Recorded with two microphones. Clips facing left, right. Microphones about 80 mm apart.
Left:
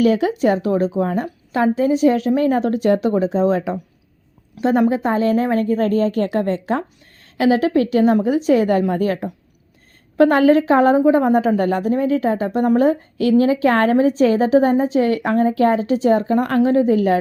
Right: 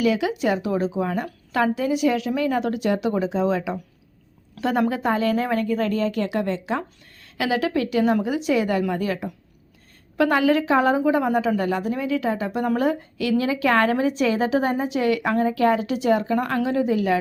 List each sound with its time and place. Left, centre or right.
0.0 s speech: left
1.2 s a woman's voice: left
4.6 s a woman's voice: left